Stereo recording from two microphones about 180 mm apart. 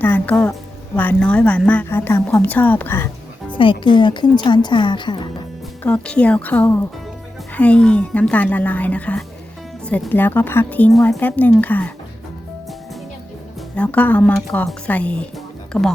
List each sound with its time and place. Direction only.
0.0 s music: 10° left (ahead or behind)
0.9 s a woman's voice: 10° left (ahead or behind)
3.6 s a woman's voice: 25° left (ahead or behind)
5.8 s a woman's voice: 5° left (ahead or behind)
13.7 s a woman's voice: 5° left (ahead or behind)